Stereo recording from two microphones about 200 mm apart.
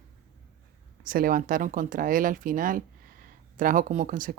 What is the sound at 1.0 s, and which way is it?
Speech, 45° right (ahead or behind).